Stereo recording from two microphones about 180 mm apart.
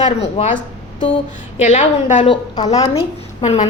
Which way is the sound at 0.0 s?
35° left (ahead or behind).